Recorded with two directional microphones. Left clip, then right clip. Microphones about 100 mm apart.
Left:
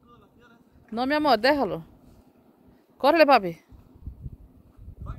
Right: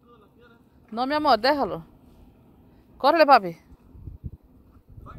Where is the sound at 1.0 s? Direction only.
45° left (ahead or behind).